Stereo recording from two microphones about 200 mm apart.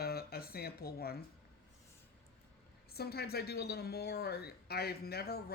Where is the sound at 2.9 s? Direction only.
50° left (ahead or behind).